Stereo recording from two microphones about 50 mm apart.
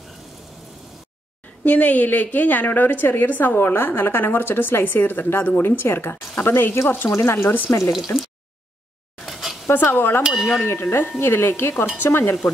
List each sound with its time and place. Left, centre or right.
1.6 s a woman's voice: left
5.8 s speech: left
7.4 s a woman's voice: left
9.2 s a sound: centre
9.7 s speech: left
10.2 s wind chime: centre
10.8 s speech: left